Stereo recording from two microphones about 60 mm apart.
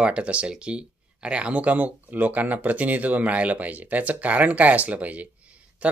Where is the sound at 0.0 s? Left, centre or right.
Centre.